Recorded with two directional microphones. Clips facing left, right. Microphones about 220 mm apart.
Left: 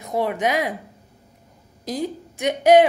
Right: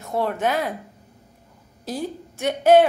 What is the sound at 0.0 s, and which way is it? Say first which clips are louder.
Speech: left 1 dB; 15° left (ahead or behind).